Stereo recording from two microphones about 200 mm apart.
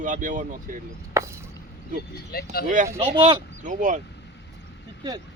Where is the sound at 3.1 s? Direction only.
25° right (ahead or behind).